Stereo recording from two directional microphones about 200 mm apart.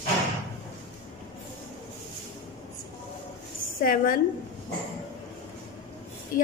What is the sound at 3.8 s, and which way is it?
Speech, 40° left (ahead or behind).